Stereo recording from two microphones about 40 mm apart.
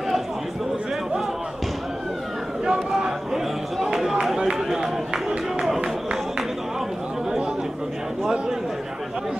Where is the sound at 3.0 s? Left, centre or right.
Centre.